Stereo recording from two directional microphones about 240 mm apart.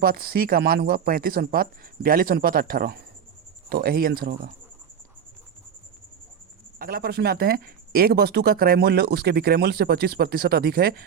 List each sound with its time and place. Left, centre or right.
0.0 s speech: right
6.7 s speech: right